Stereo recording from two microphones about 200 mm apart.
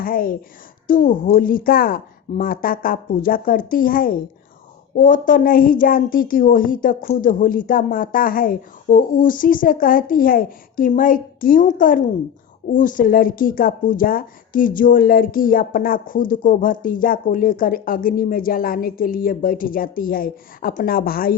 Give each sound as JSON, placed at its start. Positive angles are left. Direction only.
{"t": 0.0, "sound": "a woman's voice", "side_deg": 45}